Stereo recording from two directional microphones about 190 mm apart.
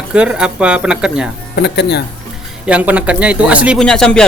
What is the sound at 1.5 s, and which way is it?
Speech, 60° left (ahead or behind).